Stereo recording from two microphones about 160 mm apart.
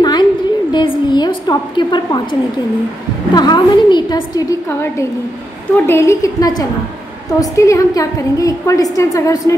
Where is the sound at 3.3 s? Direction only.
25° left (ahead or behind).